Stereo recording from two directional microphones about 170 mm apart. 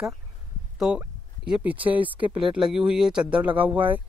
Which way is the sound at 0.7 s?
5° right (ahead or behind).